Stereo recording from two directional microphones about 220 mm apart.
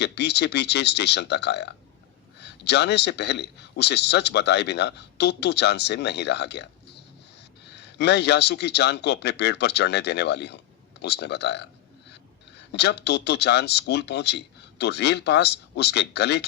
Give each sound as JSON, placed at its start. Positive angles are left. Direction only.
{"t": 0.0, "sound": "a man's voice", "side_deg": 50}
{"t": 12.7, "sound": "a man's voice", "side_deg": 50}